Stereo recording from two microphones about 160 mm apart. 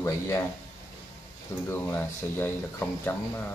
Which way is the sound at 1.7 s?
10° left (ahead or behind).